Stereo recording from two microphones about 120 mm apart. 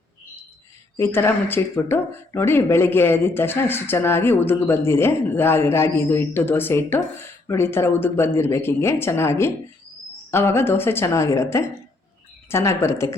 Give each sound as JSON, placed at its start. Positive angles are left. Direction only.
{"t": 0.9, "sound": "speech", "side_deg": 20}